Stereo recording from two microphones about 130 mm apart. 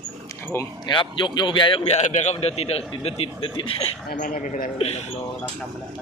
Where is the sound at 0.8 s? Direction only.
35° left (ahead or behind).